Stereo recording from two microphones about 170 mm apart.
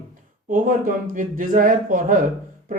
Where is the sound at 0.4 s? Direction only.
50° right (ahead or behind).